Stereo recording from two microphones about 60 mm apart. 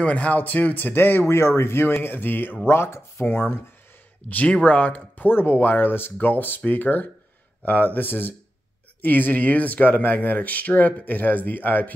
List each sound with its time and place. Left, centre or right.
0.0 s speech: left
1.2 s speech: left
4.3 s speech: left